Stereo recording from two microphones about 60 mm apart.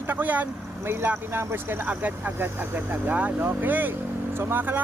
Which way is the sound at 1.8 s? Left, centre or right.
Right.